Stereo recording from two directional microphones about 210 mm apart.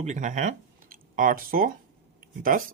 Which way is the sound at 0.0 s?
35° right (ahead or behind).